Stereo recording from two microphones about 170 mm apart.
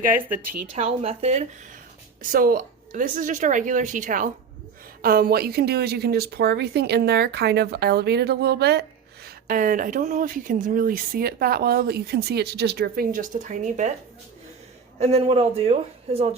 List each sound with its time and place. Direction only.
0.7 s speech: 40° right (ahead or behind)
2.3 s speech: 55° right (ahead or behind)
14.9 s speech: 40° right (ahead or behind)